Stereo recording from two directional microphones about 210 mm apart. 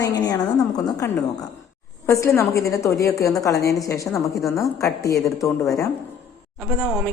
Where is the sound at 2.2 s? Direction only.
15° left (ahead or behind).